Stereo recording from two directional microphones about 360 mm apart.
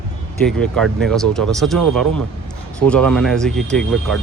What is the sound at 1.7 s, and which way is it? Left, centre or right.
Speech, right.